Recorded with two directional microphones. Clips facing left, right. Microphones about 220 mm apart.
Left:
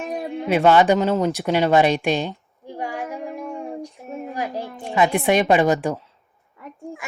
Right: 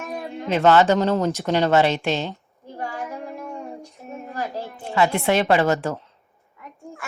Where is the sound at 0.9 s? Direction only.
5° left (ahead or behind).